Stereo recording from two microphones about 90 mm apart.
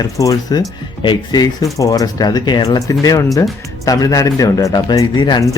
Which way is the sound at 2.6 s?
40° left (ahead or behind).